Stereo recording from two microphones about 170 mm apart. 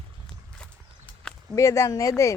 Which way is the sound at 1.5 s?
20° left (ahead or behind).